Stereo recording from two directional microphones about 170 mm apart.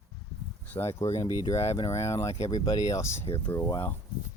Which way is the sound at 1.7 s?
35° left (ahead or behind).